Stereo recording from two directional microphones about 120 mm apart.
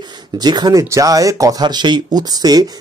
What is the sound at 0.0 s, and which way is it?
Speech, 35° right (ahead or behind).